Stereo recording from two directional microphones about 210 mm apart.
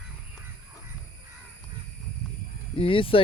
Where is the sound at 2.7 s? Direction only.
25° left (ahead or behind).